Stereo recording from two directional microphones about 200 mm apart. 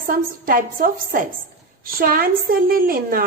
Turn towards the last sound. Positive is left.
turn(degrees=-45)  # may be behind; listen again after turning